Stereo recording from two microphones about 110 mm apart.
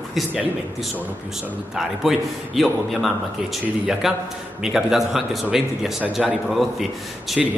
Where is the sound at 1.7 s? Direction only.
Centre (ahead or behind).